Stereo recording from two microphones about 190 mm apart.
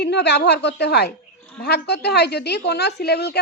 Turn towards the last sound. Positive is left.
turn(degrees=60)  # may be behind; listen again after turning